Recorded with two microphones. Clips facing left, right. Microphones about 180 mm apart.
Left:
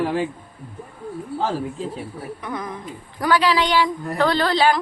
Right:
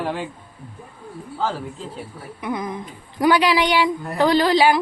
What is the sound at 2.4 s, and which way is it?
A woman's voice, 15° right (ahead or behind).